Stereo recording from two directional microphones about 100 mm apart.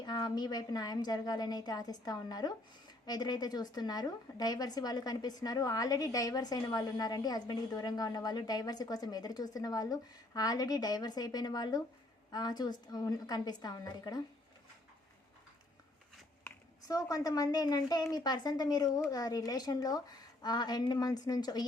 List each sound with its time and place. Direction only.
0.0 s a woman's voice: 45° left (ahead or behind)
16.8 s a woman's voice: 40° left (ahead or behind)